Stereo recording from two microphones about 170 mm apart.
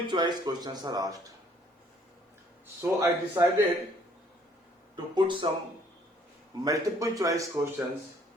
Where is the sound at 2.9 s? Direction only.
20° right (ahead or behind).